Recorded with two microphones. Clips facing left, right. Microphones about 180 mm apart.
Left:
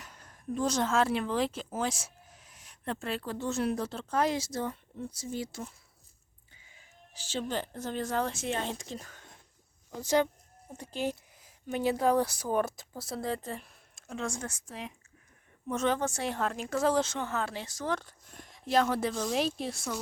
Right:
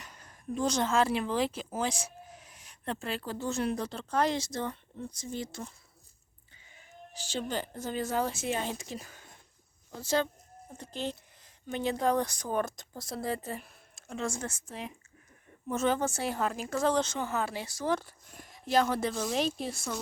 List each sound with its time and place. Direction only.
0.0 s speech: centre (ahead or behind)
7.1 s speech: 5° left (ahead or behind)
9.9 s speech: 15° left (ahead or behind); by 20.0 s centre (ahead or behind)